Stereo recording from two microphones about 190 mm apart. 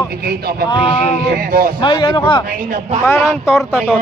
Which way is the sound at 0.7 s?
25° left (ahead or behind).